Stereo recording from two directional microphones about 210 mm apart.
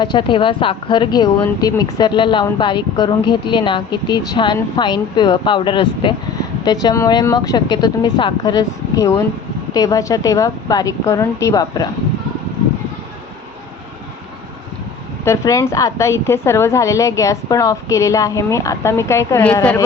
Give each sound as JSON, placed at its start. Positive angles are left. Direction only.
{"t": 0.0, "sound": "a woman's voice", "side_deg": 20}
{"t": 15.2, "sound": "a woman's voice", "side_deg": 15}